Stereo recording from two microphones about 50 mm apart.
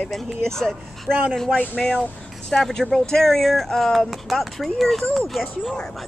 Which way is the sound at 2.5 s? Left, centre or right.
Centre.